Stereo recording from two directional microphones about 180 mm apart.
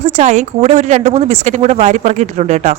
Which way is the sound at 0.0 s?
40° right (ahead or behind).